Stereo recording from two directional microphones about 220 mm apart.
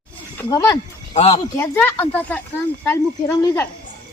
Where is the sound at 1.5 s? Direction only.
10° left (ahead or behind).